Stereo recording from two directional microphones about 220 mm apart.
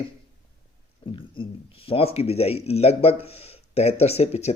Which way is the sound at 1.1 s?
25° left (ahead or behind).